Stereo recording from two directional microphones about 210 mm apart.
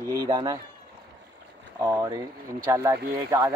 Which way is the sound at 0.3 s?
20° right (ahead or behind).